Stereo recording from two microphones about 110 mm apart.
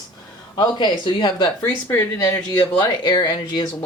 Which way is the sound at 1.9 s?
25° left (ahead or behind).